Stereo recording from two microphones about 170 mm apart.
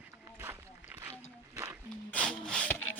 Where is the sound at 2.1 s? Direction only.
5° left (ahead or behind).